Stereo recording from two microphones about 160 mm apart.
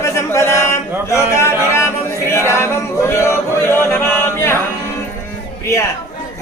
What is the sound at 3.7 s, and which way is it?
Chant, 15° left (ahead or behind).